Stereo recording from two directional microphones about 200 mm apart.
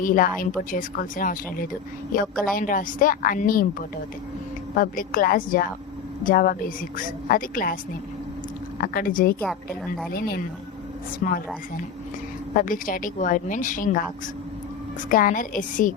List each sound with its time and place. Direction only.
0.0 s speech: 45° left (ahead or behind)
8.8 s a woman's voice: 45° left (ahead or behind)
12.5 s a woman's voice: 40° left (ahead or behind)
15.1 s a woman's voice: 45° left (ahead or behind)